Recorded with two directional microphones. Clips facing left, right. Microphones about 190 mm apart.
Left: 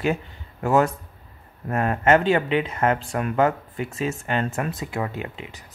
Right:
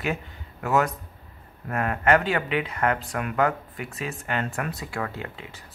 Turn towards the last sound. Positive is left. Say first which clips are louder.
# left 4 dB
turn(degrees=20)  # may be behind; listen again after turning